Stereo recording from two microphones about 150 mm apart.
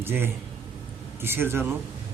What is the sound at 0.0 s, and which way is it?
A man's voice, 15° right (ahead or behind).